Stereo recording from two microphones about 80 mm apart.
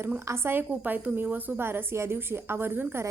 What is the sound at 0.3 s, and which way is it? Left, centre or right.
A woman's voice, right.